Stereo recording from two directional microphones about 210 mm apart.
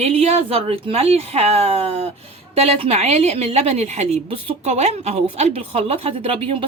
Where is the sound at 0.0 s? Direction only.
30° right (ahead or behind).